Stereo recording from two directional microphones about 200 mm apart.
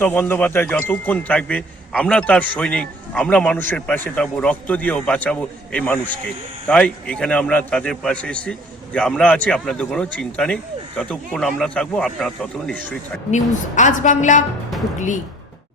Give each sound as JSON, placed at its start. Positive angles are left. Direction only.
{"t": 0.0, "sound": "a man's voice", "side_deg": 10}
{"t": 13.3, "sound": "a woman's voice", "side_deg": 40}